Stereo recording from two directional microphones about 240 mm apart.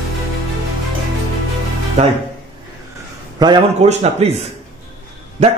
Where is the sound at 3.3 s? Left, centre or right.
Centre.